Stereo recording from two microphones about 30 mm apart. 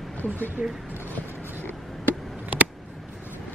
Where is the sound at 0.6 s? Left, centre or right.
Right.